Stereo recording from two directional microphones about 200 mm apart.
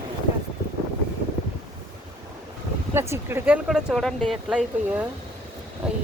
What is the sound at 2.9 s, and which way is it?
Speech, 10° right (ahead or behind).